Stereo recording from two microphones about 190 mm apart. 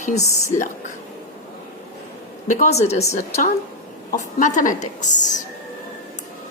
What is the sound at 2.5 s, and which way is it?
Speech, 40° left (ahead or behind).